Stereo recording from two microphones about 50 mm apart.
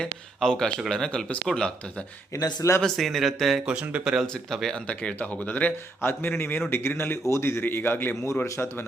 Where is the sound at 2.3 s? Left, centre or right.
Left.